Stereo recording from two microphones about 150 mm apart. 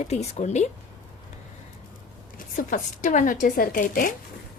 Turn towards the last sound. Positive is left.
turn(degrees=65)  # may be behind; listen again after turning